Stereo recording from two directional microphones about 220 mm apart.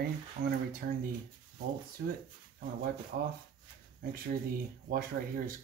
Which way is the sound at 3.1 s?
40° right (ahead or behind).